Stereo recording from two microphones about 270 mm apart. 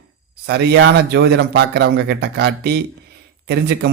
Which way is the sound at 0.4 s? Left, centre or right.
Right.